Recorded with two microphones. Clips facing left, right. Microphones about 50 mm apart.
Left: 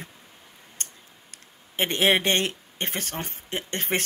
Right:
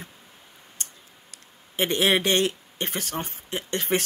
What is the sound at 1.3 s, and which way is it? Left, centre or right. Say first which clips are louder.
Speech: right 1 dB; left.